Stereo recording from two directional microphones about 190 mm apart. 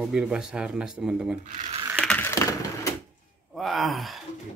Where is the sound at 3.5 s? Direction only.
Centre (ahead or behind).